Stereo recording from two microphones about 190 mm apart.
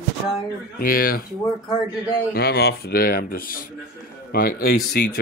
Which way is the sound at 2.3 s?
60° left (ahead or behind).